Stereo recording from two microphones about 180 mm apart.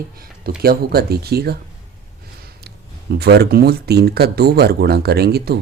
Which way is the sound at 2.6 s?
60° right (ahead or behind).